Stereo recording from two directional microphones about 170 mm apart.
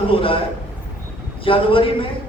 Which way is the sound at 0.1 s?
30° left (ahead or behind).